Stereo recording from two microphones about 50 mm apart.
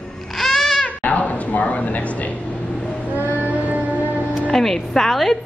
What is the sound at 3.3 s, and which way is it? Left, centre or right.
Music, right.